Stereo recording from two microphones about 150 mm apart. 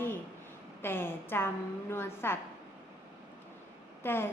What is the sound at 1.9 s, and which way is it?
Speech, 15° left (ahead or behind).